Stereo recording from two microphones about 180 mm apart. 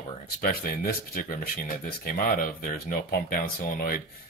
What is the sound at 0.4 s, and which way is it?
Speech, 55° left (ahead or behind).